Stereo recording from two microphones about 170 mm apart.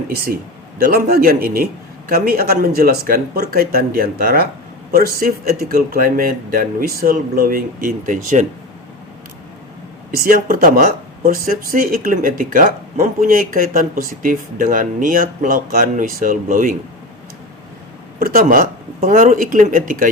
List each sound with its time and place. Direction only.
1.1 s speech: 60° right (ahead or behind)
10.2 s speech: 55° right (ahead or behind)
18.2 s speech: 60° right (ahead or behind)